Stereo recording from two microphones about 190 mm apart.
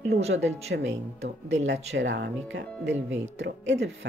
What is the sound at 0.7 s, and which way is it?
Speech, 70° right (ahead or behind).